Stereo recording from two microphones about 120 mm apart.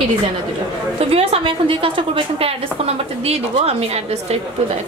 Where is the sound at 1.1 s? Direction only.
55° right (ahead or behind).